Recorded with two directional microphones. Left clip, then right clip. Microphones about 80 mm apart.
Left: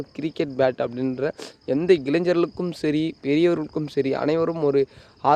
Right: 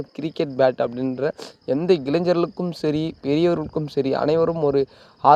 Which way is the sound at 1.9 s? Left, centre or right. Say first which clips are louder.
Even; centre.